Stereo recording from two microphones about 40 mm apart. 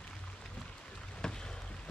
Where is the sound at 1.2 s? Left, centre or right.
Centre.